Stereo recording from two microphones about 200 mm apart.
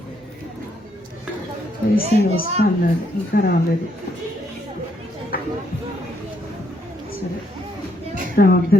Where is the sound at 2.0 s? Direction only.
30° right (ahead or behind).